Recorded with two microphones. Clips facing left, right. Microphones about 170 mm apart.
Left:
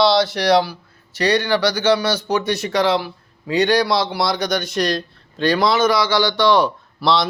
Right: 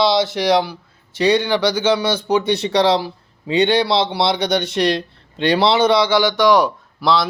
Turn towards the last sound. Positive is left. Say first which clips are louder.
# right 1 dB
turn(degrees=-10)  # may be behind; listen again after turning